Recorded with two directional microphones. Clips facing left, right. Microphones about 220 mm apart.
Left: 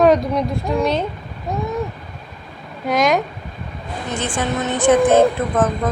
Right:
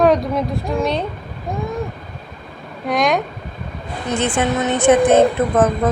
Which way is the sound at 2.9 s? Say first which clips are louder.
Left 1 dB; centre (ahead or behind).